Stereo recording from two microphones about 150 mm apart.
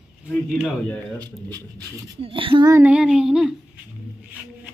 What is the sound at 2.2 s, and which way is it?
Speech, 35° right (ahead or behind).